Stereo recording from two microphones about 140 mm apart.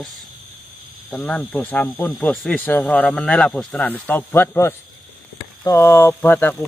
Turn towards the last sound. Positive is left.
turn(degrees=15)  # may be behind; listen again after turning